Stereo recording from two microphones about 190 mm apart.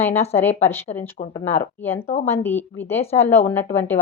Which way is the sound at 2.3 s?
10° left (ahead or behind).